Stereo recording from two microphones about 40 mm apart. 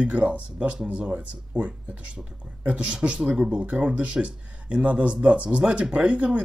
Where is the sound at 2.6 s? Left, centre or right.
Right.